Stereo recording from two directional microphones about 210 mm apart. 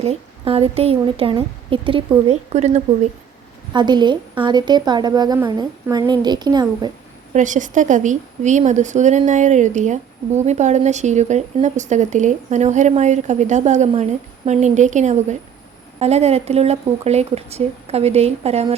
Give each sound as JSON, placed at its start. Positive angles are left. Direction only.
{"t": 0.0, "sound": "a woman's voice", "side_deg": -30}
{"t": 3.7, "sound": "a woman's voice", "side_deg": -20}
{"t": 7.3, "sound": "a woman's voice", "side_deg": -35}